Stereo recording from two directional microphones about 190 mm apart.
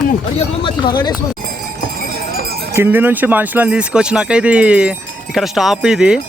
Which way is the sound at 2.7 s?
10° right (ahead or behind).